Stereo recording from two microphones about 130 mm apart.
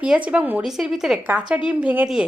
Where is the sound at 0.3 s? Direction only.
10° right (ahead or behind).